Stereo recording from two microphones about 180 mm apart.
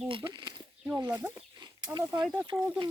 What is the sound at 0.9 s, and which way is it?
Speech, 15° right (ahead or behind).